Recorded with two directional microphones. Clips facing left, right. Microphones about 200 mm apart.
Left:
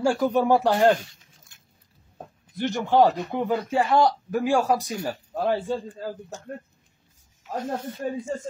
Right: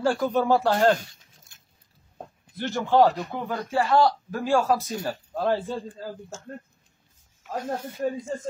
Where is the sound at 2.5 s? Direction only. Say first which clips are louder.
Even; 15° left (ahead or behind).